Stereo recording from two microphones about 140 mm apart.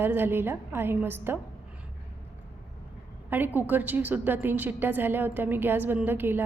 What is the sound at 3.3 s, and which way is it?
A woman's voice, 15° right (ahead or behind).